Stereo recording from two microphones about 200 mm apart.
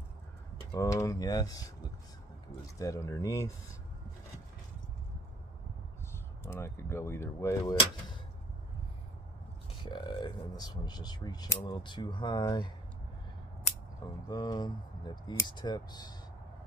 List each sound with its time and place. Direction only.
0.7 s speech: 15° left (ahead or behind)
2.8 s speech: 15° left (ahead or behind)
6.4 s speech: 15° left (ahead or behind)
9.8 s speech: 25° left (ahead or behind)
14.3 s speech: 20° left (ahead or behind)